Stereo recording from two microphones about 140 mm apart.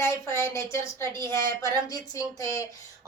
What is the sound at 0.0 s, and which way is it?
A woman's voice, 20° left (ahead or behind).